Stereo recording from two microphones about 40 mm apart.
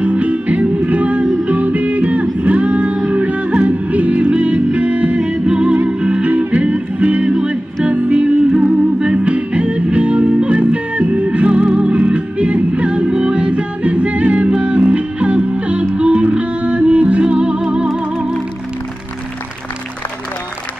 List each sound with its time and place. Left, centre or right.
0.0 s music: right
6.2 s music: right